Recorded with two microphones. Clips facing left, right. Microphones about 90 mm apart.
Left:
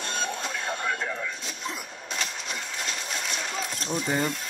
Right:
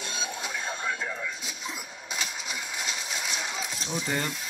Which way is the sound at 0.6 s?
55° left (ahead or behind).